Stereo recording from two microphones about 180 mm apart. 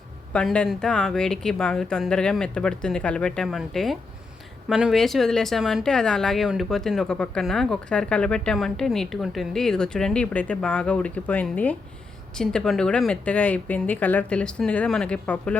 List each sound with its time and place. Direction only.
0.3 s speech: 5° left (ahead or behind)